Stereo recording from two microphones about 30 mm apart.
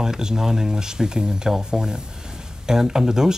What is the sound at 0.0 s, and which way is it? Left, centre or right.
Speech, right.